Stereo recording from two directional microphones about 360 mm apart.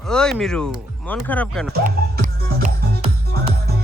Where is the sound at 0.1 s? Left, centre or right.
Centre.